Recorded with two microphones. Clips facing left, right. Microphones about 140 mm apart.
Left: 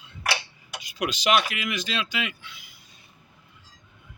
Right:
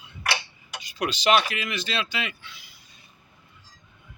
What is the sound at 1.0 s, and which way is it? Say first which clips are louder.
Speech: right 1 dB; 5° left (ahead or behind).